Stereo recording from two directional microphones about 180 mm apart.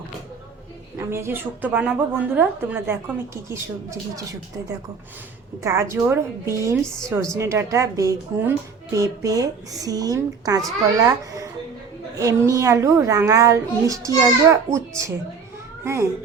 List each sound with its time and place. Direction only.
0.9 s speech: 15° right (ahead or behind)
5.6 s speech: 15° right (ahead or behind)
12.1 s a child's voice: 15° right (ahead or behind)